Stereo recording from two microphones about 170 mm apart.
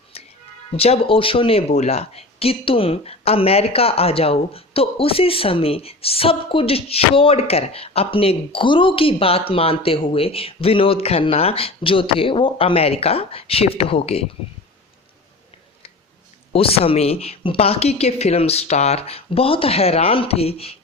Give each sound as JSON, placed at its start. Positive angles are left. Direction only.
{"t": 0.1, "sound": "music", "side_deg": 35}
{"t": 0.7, "sound": "speech", "side_deg": 35}
{"t": 16.5, "sound": "speech", "side_deg": 35}